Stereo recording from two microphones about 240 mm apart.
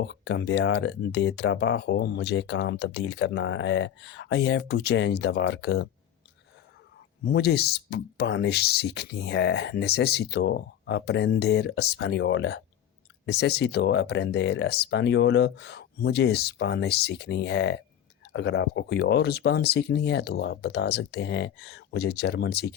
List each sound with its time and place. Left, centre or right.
0.0 s speech: left
7.3 s speech: left